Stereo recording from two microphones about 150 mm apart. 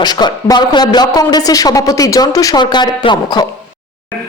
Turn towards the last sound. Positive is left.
turn(degrees=30)  # may be behind; listen again after turning